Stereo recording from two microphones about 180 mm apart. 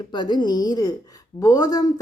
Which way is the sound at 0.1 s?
25° left (ahead or behind).